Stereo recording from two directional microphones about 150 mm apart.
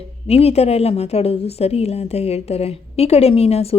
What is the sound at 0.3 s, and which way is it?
A woman's voice, 45° left (ahead or behind).